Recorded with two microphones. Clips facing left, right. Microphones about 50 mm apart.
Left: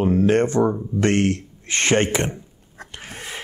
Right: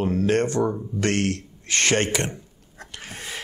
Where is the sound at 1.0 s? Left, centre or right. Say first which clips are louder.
Left 4 dB; left.